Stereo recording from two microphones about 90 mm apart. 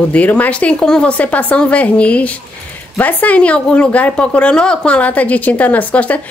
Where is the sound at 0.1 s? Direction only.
15° left (ahead or behind).